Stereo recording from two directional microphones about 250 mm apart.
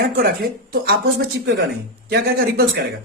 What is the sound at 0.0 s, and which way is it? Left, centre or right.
Speech, right.